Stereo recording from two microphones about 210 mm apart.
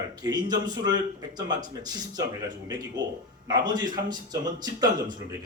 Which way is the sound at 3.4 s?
20° right (ahead or behind).